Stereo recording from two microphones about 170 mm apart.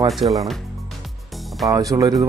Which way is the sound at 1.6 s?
20° right (ahead or behind).